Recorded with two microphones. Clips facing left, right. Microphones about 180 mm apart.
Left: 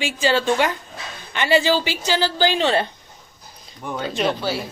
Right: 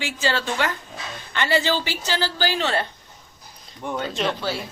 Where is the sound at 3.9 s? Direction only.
5° left (ahead or behind).